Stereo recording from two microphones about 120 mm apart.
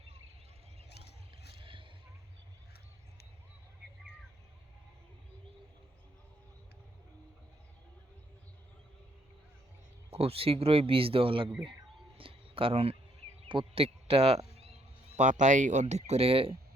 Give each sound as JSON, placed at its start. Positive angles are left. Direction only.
{"t": 1.5, "sound": "vehicle", "side_deg": -45}
{"t": 10.1, "sound": "speech", "side_deg": -55}
{"t": 12.1, "sound": "a sound", "side_deg": -50}
{"t": 15.1, "sound": "speech", "side_deg": -90}